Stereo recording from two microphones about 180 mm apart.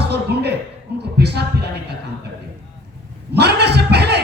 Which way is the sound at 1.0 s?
65° right (ahead or behind).